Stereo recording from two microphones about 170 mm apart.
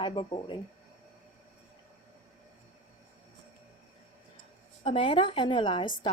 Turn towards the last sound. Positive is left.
turn(degrees=30)  # may be behind; listen again after turning